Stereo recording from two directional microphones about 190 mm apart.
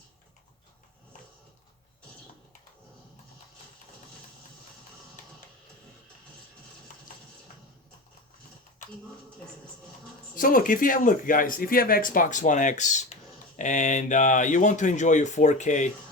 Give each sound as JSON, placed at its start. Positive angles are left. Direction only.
{"t": 10.3, "sound": "speech", "side_deg": 45}